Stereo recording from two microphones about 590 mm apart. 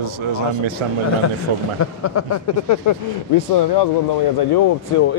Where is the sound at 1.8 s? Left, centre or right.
Left.